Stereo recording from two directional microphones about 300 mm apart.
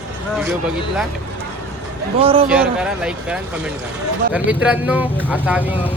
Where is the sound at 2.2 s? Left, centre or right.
Centre.